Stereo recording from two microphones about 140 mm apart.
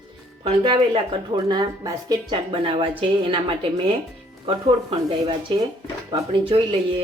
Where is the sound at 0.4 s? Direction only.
35° right (ahead or behind).